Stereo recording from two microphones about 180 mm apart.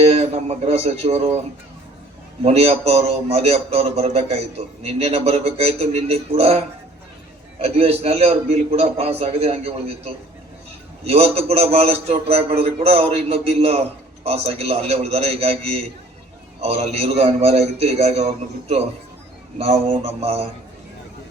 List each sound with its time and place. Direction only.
0.0 s a man's voice: 35° right (ahead or behind)
2.4 s a man's voice: 35° right (ahead or behind)